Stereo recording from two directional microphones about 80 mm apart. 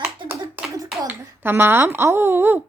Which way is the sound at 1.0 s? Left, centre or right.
Right.